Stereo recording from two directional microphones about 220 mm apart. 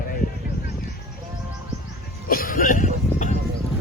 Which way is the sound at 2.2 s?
40° left (ahead or behind).